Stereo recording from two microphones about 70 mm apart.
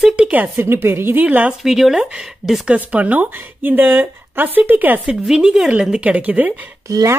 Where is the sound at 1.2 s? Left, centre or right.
Right.